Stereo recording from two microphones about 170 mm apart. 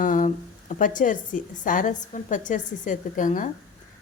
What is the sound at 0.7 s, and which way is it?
A woman's voice, 50° left (ahead or behind).